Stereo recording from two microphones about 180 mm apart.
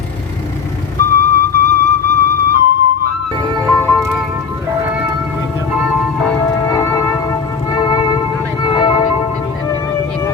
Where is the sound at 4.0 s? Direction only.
10° right (ahead or behind).